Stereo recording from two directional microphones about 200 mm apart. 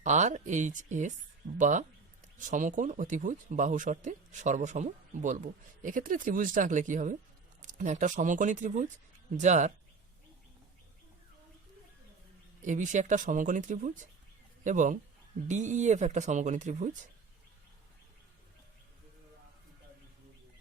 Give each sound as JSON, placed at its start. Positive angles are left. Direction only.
{"t": 0.0, "sound": "speech", "side_deg": -35}
{"t": 12.6, "sound": "speech", "side_deg": -40}